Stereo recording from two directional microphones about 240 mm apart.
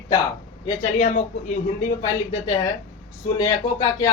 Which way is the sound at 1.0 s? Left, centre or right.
Left.